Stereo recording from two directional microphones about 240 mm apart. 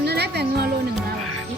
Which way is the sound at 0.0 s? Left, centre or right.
Right.